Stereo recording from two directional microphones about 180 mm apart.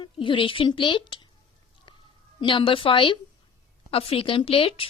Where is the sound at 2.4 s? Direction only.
25° left (ahead or behind).